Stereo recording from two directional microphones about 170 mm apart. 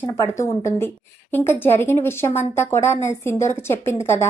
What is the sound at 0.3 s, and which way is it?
A woman's voice, 15° left (ahead or behind).